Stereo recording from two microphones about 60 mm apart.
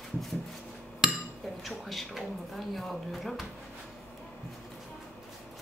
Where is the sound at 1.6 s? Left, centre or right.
Centre.